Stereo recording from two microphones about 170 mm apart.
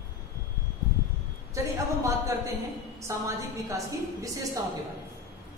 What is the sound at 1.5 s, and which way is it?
A woman's voice, 15° right (ahead or behind).